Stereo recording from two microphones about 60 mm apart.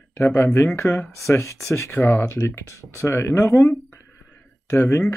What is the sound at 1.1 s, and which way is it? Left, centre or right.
Speech, left.